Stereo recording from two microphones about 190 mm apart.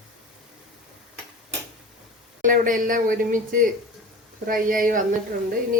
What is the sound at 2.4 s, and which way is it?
Speech, 45° right (ahead or behind).